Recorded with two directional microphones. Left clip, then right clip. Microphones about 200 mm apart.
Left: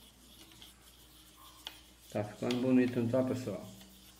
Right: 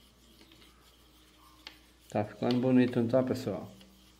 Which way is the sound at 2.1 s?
40° right (ahead or behind).